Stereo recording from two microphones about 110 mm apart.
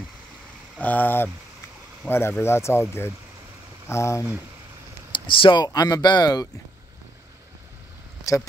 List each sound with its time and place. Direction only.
0.7 s speech: 15° left (ahead or behind)
5.1 s speech: 50° left (ahead or behind)